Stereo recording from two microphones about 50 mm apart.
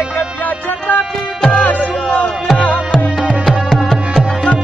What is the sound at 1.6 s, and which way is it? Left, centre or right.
Music, left.